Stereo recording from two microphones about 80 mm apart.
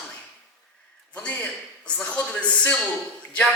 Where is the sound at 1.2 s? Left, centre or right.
Centre.